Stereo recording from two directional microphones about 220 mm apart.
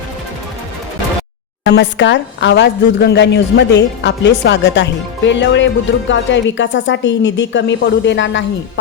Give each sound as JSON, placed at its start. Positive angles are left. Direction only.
{"t": 1.6, "sound": "a woman's voice", "side_deg": 55}